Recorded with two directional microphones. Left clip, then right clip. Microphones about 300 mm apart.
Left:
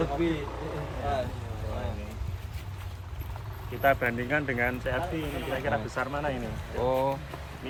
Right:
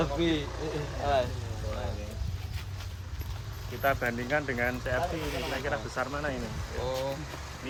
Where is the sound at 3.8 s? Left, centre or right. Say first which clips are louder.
Left 4 dB; left.